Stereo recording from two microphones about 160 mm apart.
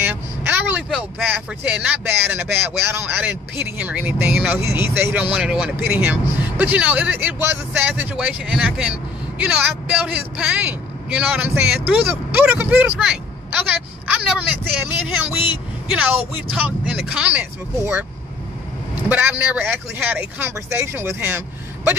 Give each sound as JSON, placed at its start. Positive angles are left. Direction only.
{"t": 0.0, "sound": "vehicle", "side_deg": -10}
{"t": 0.9, "sound": "speech", "side_deg": -10}
{"t": 15.9, "sound": "speech", "side_deg": -10}
{"t": 19.0, "sound": "speech", "side_deg": -10}